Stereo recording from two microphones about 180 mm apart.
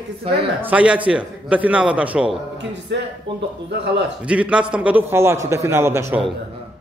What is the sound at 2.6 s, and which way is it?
Speech, 80° right.